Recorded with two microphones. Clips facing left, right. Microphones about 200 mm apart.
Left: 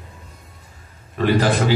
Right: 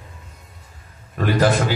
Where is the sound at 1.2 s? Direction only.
45° right (ahead or behind).